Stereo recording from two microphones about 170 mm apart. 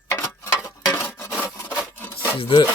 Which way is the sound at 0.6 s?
15° left (ahead or behind).